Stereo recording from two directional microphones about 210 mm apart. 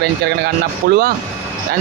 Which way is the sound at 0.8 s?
45° right (ahead or behind).